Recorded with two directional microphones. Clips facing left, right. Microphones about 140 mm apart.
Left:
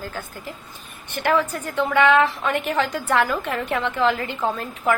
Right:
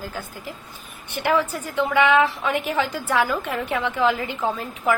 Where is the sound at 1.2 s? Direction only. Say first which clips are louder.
Left 1 dB; 10° right (ahead or behind).